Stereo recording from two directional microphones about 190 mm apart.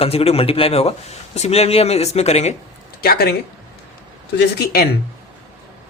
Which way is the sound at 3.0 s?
55° left (ahead or behind).